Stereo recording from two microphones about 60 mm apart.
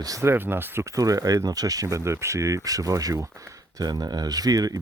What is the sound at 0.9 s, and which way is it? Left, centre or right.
Speech, right.